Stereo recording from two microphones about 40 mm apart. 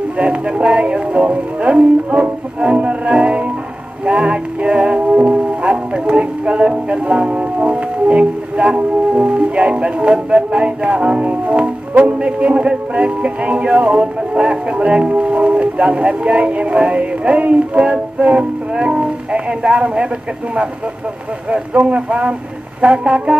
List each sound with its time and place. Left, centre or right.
0.2 s music: right
21.5 s music: right